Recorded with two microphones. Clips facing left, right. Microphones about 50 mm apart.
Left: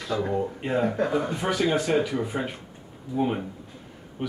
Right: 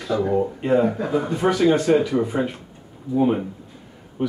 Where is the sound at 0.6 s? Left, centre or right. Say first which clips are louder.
Right 4 dB; centre.